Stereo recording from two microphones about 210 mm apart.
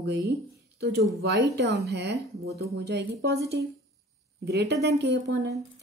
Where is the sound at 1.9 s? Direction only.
50° right (ahead or behind).